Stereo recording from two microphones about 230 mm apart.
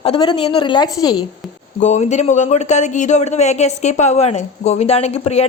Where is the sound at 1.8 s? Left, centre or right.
Left.